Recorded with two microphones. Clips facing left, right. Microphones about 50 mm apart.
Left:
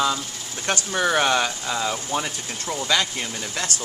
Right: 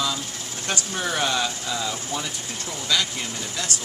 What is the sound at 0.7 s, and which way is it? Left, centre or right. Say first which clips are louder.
Speech: left 5 dB; left.